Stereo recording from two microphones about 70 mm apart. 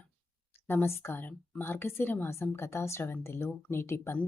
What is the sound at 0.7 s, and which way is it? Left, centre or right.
Speech, left.